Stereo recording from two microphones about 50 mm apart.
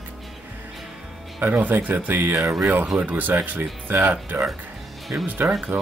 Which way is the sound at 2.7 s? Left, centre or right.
Right.